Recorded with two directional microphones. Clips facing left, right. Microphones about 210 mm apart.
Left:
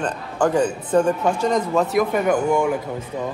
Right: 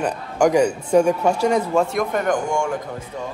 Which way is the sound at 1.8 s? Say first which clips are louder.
Left 2 dB; 5° left (ahead or behind).